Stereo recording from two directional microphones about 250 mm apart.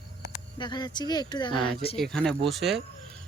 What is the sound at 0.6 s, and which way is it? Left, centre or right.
Speech, centre.